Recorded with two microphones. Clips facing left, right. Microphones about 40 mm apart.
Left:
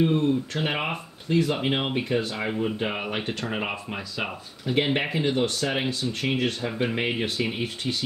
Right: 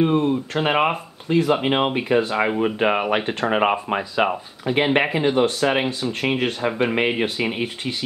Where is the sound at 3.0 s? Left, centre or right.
Right.